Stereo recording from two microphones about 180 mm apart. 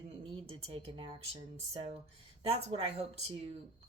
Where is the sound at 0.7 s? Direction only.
30° right (ahead or behind).